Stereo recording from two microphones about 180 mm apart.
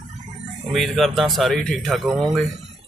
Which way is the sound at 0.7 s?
Centre (ahead or behind).